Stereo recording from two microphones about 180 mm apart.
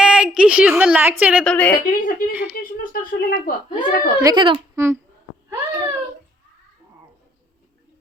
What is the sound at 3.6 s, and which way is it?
Speech, 30° left (ahead or behind).